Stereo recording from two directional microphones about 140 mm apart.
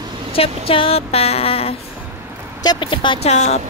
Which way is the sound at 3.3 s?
55° left (ahead or behind).